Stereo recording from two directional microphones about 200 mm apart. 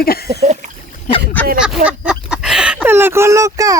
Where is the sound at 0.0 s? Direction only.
50° left (ahead or behind).